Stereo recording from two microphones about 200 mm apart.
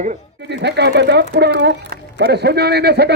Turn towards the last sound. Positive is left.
turn(degrees=-55)  # may be behind; listen again after turning